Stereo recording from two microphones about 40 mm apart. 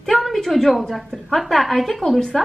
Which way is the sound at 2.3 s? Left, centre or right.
Centre.